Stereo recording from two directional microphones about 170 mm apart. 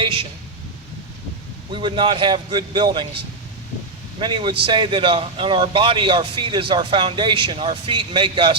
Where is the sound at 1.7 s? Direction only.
30° right (ahead or behind).